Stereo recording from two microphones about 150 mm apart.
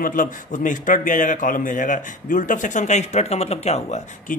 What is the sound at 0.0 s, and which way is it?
A man's voice, 65° left (ahead or behind).